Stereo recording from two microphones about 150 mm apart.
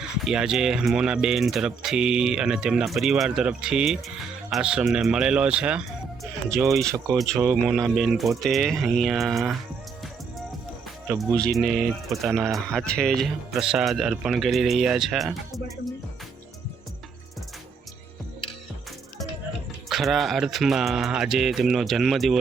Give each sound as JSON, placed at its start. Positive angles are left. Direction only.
{"t": 0.3, "sound": "speech", "side_deg": -5}
{"t": 7.2, "sound": "speech", "side_deg": 0}
{"t": 11.1, "sound": "speech", "side_deg": 5}
{"t": 19.9, "sound": "speech", "side_deg": 0}